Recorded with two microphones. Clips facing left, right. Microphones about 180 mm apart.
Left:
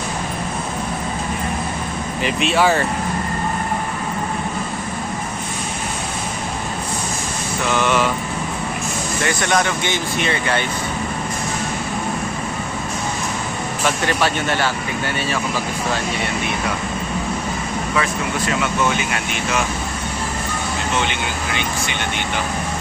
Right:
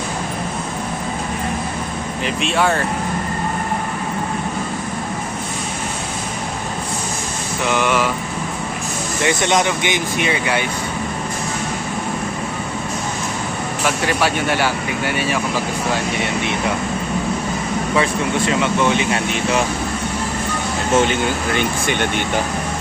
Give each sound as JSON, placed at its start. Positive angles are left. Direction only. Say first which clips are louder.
{"t": 2.2, "sound": "speech", "louder": "left 2 dB", "side_deg": 0}
{"t": 7.7, "sound": "vehicle", "louder": "even", "side_deg": -10}
{"t": 9.2, "sound": "speech", "louder": "right 3 dB", "side_deg": -20}
{"t": 13.8, "sound": "speech", "louder": "right 1 dB", "side_deg": -10}
{"t": 17.9, "sound": "speech", "louder": "right 4 dB", "side_deg": -25}
{"t": 20.9, "sound": "speech", "louder": "right 9 dB", "side_deg": -45}